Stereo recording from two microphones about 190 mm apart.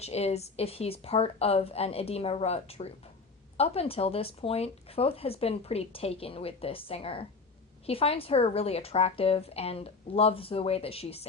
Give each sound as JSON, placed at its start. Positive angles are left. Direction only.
{"t": 0.0, "sound": "speech", "side_deg": 35}